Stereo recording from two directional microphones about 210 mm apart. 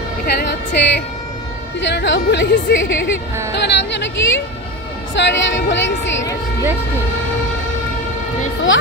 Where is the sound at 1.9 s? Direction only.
55° left (ahead or behind).